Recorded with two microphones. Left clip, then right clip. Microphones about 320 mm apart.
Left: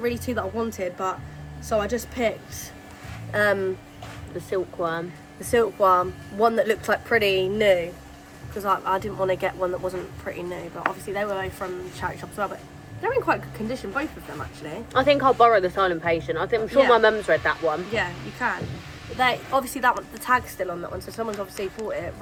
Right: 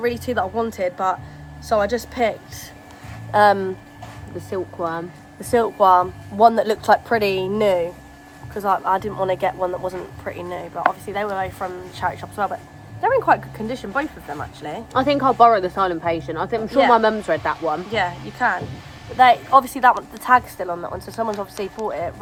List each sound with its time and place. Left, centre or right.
0.3 s speech: centre
3.3 s speech: centre
4.4 s speech: right
5.5 s speech: centre
14.9 s speech: right
17.9 s speech: centre